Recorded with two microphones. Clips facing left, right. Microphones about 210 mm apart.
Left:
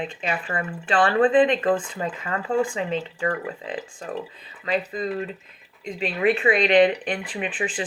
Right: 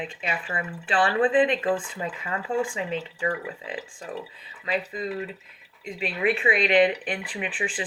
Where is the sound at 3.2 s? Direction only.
55° left (ahead or behind).